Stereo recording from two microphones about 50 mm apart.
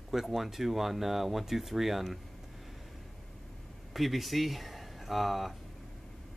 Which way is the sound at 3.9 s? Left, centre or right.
Centre.